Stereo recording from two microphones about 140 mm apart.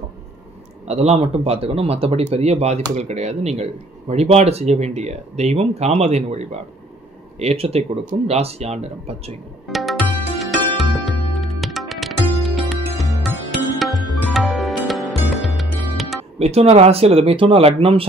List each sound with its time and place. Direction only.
0.8 s speech: 50° right (ahead or behind)
9.7 s music: centre (ahead or behind)
16.3 s speech: 50° right (ahead or behind)